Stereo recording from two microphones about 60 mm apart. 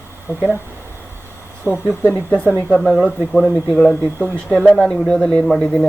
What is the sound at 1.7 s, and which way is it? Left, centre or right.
Speech, left.